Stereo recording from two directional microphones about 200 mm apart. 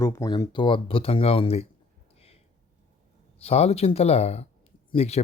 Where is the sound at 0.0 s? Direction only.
15° left (ahead or behind).